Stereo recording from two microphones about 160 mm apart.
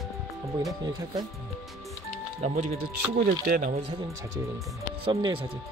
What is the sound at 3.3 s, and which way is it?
Speech, 70° right (ahead or behind).